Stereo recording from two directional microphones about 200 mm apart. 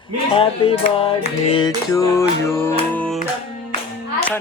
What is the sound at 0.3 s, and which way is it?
Music, 25° left (ahead or behind).